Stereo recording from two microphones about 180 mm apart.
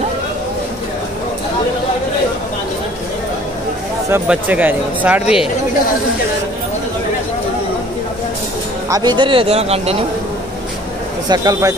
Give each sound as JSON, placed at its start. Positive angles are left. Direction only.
{"t": 4.1, "sound": "speech", "side_deg": -10}
{"t": 8.8, "sound": "speech", "side_deg": -20}
{"t": 11.2, "sound": "speech", "side_deg": -20}